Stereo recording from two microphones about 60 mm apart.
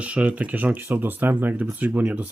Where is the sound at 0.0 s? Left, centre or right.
Right.